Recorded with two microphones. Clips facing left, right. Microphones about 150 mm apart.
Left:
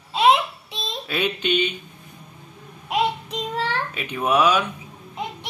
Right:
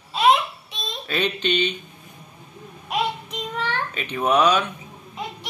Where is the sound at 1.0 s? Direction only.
5° left (ahead or behind).